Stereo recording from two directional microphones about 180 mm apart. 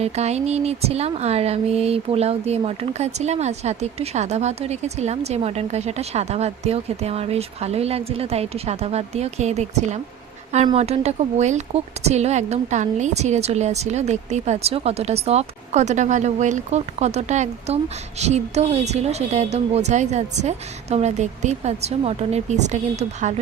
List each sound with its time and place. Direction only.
0.0 s speech: 35° right (ahead or behind)